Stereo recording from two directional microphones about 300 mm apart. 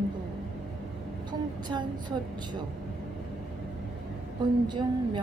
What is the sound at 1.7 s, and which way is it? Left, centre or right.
Speech, centre.